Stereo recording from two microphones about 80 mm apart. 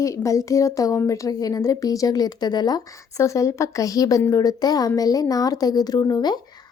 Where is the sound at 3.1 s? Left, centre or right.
Left.